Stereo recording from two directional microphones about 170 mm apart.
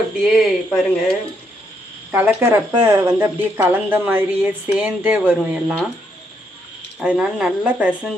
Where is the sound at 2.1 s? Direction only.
10° right (ahead or behind).